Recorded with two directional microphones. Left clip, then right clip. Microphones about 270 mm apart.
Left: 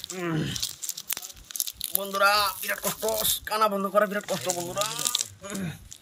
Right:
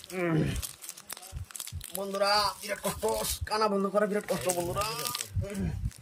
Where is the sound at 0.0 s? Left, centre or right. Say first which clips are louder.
Even; centre.